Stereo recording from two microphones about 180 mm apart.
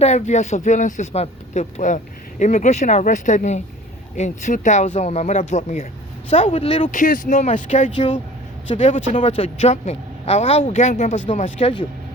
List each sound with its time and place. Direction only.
0.0 s speech: 40° left (ahead or behind)
6.9 s speech: 45° left (ahead or behind)